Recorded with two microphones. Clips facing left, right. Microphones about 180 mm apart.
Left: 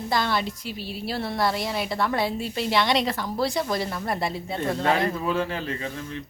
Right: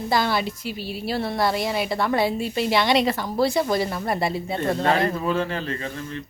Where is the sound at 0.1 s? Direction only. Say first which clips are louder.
Right 3 dB; 5° right (ahead or behind).